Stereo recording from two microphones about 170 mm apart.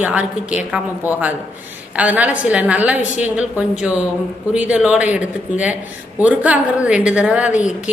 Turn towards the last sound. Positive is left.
turn(degrees=-5)  # may be behind; listen again after turning